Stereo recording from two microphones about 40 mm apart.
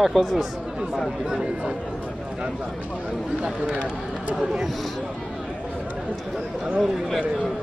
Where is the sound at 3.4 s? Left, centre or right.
Right.